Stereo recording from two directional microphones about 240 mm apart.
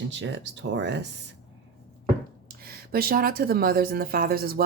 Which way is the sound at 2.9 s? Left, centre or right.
Right.